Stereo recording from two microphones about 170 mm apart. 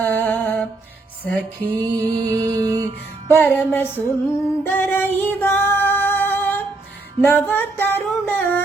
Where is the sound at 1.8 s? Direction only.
25° right (ahead or behind).